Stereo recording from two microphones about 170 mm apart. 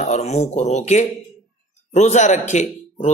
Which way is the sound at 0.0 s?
40° left (ahead or behind).